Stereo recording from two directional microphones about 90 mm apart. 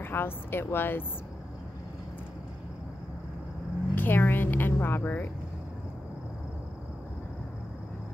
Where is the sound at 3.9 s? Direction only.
20° left (ahead or behind).